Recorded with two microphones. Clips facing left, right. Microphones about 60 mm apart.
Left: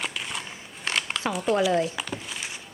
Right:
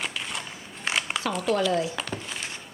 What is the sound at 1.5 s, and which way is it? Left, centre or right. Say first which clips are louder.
Speech: left 2 dB; left.